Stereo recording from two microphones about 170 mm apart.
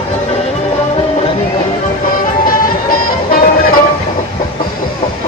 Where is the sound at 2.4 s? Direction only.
55° left (ahead or behind).